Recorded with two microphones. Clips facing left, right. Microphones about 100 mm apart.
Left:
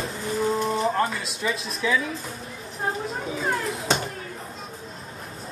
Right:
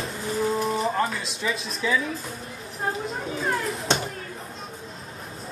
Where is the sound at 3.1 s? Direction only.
Centre (ahead or behind).